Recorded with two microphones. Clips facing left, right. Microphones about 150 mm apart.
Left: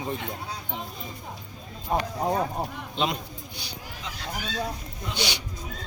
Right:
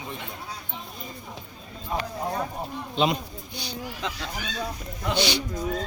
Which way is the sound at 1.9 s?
40° left (ahead or behind).